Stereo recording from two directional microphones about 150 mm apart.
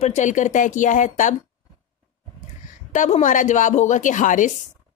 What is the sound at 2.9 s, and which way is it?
Speech, 55° left (ahead or behind).